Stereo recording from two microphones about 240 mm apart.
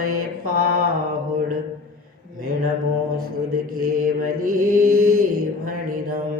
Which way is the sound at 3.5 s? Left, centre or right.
Right.